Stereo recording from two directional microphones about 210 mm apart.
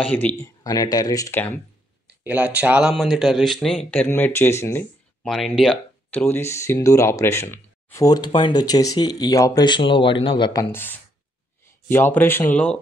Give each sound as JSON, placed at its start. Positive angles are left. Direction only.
{"t": 0.0, "sound": "speech", "side_deg": 10}
{"t": 2.0, "sound": "speech", "side_deg": -10}
{"t": 5.2, "sound": "speech", "side_deg": 0}